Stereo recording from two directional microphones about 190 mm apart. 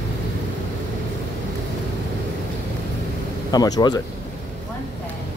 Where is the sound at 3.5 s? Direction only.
20° left (ahead or behind).